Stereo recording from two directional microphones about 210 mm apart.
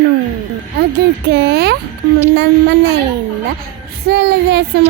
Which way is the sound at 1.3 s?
50° right (ahead or behind).